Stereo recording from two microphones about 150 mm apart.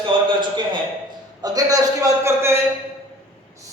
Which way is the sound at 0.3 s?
30° right (ahead or behind).